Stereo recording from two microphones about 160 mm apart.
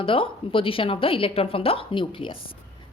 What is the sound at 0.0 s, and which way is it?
Speech, 35° left (ahead or behind).